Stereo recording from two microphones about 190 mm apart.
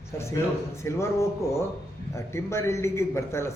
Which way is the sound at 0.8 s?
15° left (ahead or behind).